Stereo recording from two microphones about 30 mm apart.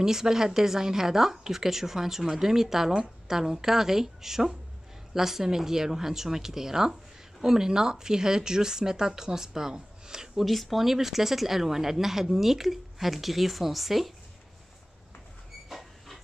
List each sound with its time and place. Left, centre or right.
0.0 s a woman's voice: centre
10.3 s a woman's voice: centre
15.7 s a sound: centre